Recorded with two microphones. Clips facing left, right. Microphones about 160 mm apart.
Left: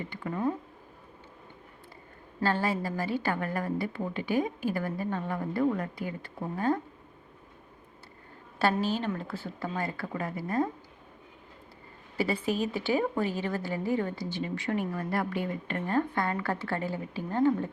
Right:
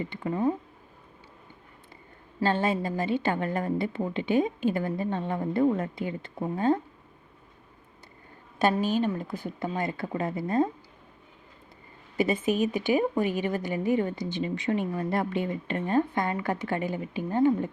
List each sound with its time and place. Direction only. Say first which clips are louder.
0.0 s a woman's voice: right 4 dB; 25° right (ahead or behind)
2.4 s a woman's voice: right 3 dB; 20° right (ahead or behind)
8.5 s a woman's voice: right 3 dB; 15° right (ahead or behind)
12.1 s a woman's voice: right 4 dB; 20° right (ahead or behind)